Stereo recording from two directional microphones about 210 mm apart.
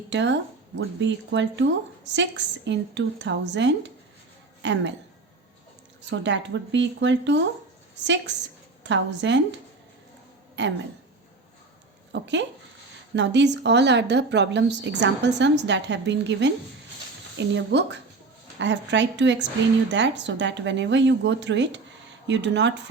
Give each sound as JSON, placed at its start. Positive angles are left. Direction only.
{"t": 0.1, "sound": "a woman's voice", "side_deg": -60}
{"t": 6.1, "sound": "a woman's voice", "side_deg": -60}
{"t": 8.8, "sound": "a woman's voice", "side_deg": -60}
{"t": 10.6, "sound": "a woman's voice", "side_deg": -55}
{"t": 12.2, "sound": "a woman's voice", "side_deg": -55}